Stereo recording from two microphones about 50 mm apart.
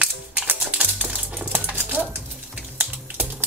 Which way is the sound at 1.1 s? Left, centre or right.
Right.